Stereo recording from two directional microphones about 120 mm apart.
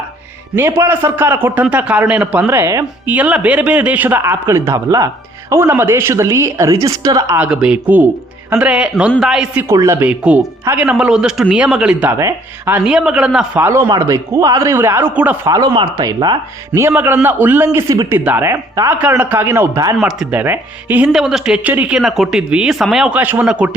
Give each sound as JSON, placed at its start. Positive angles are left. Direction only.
{"t": 0.5, "sound": "a man's voice", "side_deg": -20}
{"t": 7.3, "sound": "a man's voice", "side_deg": -10}
{"t": 9.7, "sound": "a man's voice", "side_deg": -25}
{"t": 10.1, "sound": "speech", "side_deg": -10}
{"t": 12.1, "sound": "a man's voice", "side_deg": -20}
{"t": 12.8, "sound": "a man's voice", "side_deg": -5}
{"t": 13.6, "sound": "a man's voice", "side_deg": -20}
{"t": 15.4, "sound": "speech", "side_deg": -30}
{"t": 16.7, "sound": "a man's voice", "side_deg": -20}
{"t": 18.1, "sound": "a man's voice", "side_deg": -20}
{"t": 18.9, "sound": "a man's voice", "side_deg": -15}
{"t": 20.0, "sound": "a man's voice", "side_deg": -5}
{"t": 20.4, "sound": "speech", "side_deg": -15}
{"t": 21.1, "sound": "a man's voice", "side_deg": -5}